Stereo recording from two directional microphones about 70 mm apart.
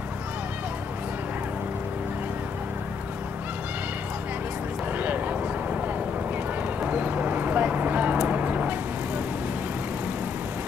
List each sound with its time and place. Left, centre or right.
4.9 s vehicle: right
6.8 s clip-clop: right